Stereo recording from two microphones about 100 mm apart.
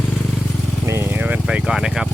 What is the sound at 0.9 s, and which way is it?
Speech, 25° right (ahead or behind).